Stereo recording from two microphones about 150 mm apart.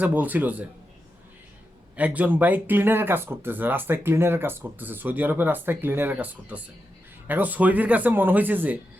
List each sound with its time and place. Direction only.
0.0 s speech: 10° right (ahead or behind)
2.0 s speech: 10° right (ahead or behind)